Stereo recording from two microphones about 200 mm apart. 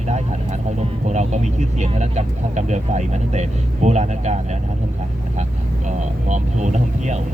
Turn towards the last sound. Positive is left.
turn(degrees=-35)  # may be behind; listen again after turning